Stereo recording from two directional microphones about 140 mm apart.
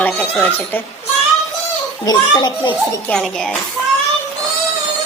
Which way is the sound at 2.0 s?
30° left (ahead or behind).